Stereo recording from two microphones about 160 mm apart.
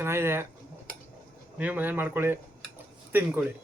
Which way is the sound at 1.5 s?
10° right (ahead or behind).